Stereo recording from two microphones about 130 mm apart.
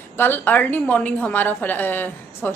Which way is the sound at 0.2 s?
15° left (ahead or behind).